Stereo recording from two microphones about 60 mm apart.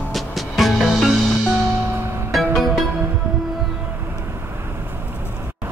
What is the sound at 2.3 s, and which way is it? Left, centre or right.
Music, centre.